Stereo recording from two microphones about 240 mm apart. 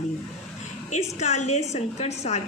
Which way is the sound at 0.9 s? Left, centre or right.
Left.